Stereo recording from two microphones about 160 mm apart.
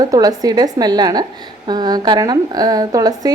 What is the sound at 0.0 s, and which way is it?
A woman's voice, 25° right (ahead or behind).